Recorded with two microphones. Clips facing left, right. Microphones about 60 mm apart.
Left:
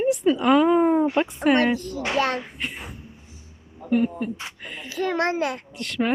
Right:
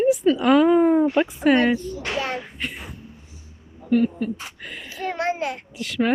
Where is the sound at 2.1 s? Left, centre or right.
Left.